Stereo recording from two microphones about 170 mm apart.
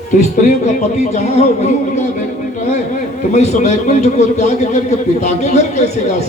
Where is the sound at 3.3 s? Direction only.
40° left (ahead or behind).